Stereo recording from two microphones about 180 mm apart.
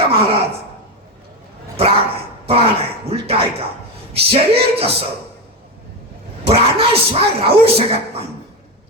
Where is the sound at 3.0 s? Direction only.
35° right (ahead or behind).